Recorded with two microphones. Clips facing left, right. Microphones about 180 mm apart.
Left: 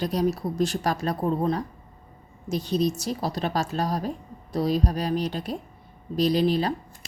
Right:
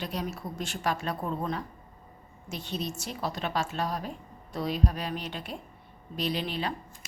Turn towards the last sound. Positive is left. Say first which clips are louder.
# left 9 dB
turn(degrees=40)  # may be behind; listen again after turning